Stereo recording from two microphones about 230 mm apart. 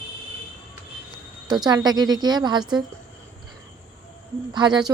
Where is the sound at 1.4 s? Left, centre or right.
Centre.